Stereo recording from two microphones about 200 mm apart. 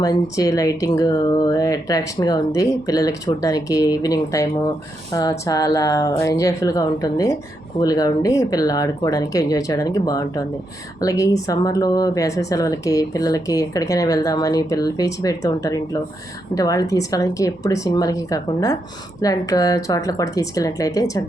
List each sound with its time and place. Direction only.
0.0 s speech: 15° left (ahead or behind)